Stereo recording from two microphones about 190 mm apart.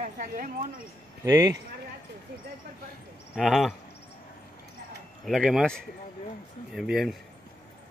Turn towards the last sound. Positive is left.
turn(degrees=0)  # may be behind; listen again after turning